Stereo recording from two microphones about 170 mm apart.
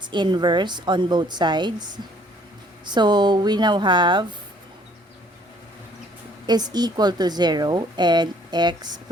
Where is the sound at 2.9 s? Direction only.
25° right (ahead or behind).